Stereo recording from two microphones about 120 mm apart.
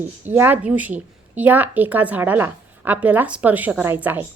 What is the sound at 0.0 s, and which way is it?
Speech, 15° right (ahead or behind).